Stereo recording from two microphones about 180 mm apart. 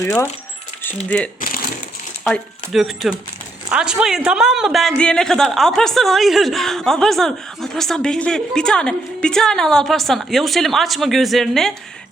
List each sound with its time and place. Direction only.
0.0 s speech: 15° left (ahead or behind)
1.4 s crumpling: 50° left (ahead or behind)
2.2 s a woman's voice: centre (ahead or behind)